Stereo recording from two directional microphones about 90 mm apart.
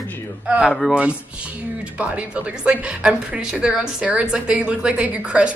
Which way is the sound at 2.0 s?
15° right (ahead or behind).